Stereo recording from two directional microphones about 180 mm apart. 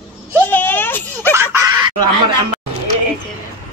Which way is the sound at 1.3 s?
20° right (ahead or behind).